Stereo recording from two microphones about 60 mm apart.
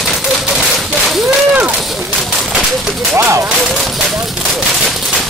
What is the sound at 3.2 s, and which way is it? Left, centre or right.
Speech, right.